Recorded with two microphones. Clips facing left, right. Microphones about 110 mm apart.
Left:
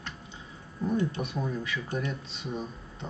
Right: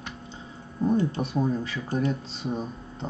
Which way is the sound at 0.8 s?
35° right (ahead or behind).